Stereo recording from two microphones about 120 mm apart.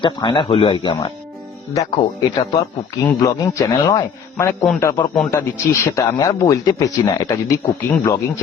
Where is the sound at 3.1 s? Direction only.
30° left (ahead or behind).